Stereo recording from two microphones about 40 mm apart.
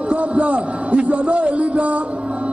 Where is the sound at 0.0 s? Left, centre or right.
Right.